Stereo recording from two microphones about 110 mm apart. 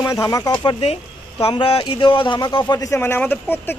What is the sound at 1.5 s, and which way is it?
Speech, 50° left (ahead or behind).